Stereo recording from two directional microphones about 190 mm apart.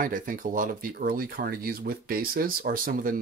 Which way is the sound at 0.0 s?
45° right (ahead or behind).